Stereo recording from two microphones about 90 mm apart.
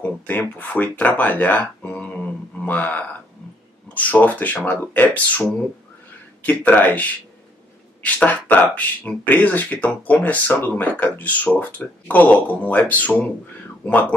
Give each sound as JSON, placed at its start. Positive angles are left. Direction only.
{"t": 0.0, "sound": "speech", "side_deg": 15}